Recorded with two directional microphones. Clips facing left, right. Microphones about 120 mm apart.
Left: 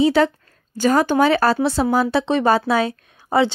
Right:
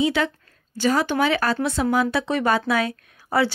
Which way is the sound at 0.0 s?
40° left (ahead or behind).